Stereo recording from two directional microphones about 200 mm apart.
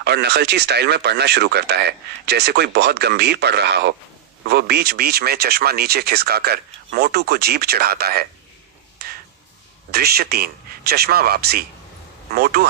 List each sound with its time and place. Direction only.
0.0 s a man's voice: 55° right (ahead or behind)
9.0 s finger snapping: 50° right (ahead or behind)
9.9 s a man's voice: 50° right (ahead or behind)